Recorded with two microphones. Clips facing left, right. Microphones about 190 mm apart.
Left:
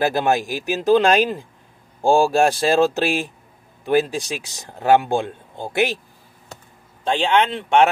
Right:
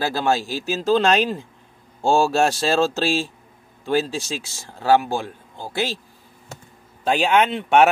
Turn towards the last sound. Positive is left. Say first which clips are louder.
# even
turn(degrees=-10)  # may be behind; listen again after turning